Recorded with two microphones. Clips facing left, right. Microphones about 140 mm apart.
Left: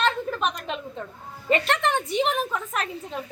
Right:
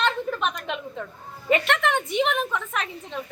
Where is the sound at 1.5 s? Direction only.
35° left (ahead or behind).